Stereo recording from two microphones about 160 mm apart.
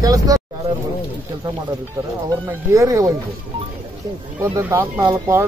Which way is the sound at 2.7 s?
20° right (ahead or behind).